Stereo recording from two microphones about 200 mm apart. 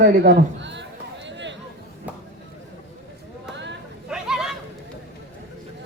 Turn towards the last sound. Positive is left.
turn(degrees=0)  # may be behind; listen again after turning